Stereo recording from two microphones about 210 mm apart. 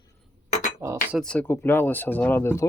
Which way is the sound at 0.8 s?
15° right (ahead or behind).